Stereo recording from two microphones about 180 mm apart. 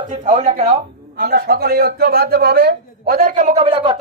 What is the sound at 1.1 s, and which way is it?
A man's voice, 60° right (ahead or behind).